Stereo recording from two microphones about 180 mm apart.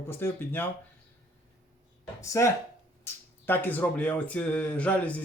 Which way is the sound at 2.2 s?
15° left (ahead or behind).